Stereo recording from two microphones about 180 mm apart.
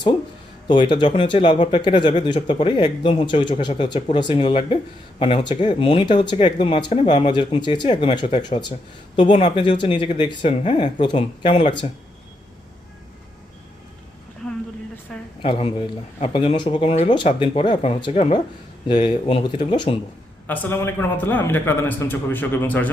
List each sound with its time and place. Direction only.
0.7 s speech: 25° left (ahead or behind)
15.4 s speech: 30° left (ahead or behind)
18.9 s speech: 25° left (ahead or behind)
20.5 s a man's voice: 10° left (ahead or behind)